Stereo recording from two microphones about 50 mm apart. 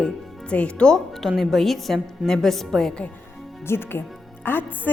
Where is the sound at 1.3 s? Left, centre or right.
Centre.